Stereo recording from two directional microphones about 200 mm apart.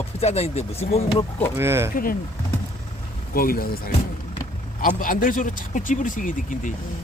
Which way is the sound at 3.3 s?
45° left (ahead or behind).